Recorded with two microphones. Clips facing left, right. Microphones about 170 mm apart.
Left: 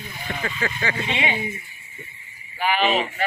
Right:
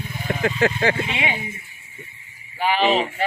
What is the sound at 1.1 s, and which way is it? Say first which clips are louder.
Speech: left 1 dB; 10° right (ahead or behind).